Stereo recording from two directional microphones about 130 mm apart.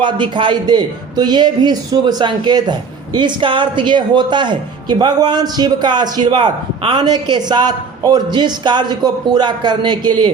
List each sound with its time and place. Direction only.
0.0 s a man's voice: 40° right (ahead or behind)